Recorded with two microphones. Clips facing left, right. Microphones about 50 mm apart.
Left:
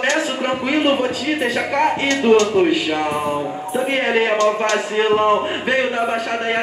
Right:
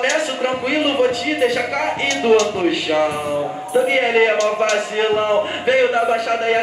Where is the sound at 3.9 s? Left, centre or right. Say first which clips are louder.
Right 1 dB; centre.